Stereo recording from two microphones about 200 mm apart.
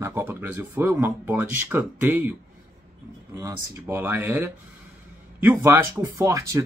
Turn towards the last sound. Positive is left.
turn(degrees=-15)  # may be behind; listen again after turning